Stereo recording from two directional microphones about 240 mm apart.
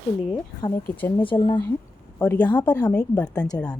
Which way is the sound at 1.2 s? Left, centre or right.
Left.